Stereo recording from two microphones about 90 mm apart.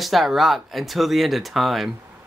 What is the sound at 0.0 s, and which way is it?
Speech, centre (ahead or behind).